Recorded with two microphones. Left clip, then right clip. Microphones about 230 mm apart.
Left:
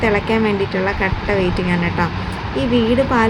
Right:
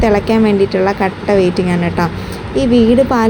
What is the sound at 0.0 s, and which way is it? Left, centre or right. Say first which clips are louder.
Speech: right 4 dB; centre.